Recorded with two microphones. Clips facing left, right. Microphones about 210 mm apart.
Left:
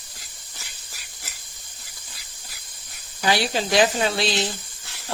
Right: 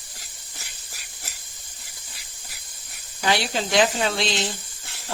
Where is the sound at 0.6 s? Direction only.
45° right (ahead or behind).